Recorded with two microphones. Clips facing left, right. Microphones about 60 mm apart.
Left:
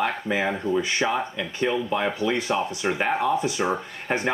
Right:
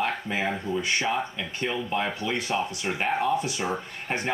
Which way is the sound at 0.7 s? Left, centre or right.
Left.